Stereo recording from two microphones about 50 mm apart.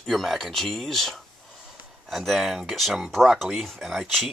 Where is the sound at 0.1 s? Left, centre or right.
Centre.